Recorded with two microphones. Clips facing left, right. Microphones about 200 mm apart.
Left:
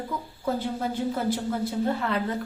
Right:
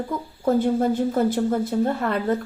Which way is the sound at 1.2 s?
45° right (ahead or behind).